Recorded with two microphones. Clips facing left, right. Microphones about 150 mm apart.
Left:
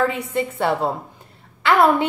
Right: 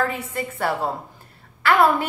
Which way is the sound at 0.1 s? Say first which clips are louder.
Left 5 dB; 25° left (ahead or behind).